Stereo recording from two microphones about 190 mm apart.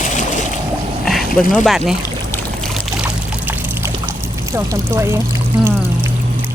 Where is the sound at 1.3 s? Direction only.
45° left (ahead or behind).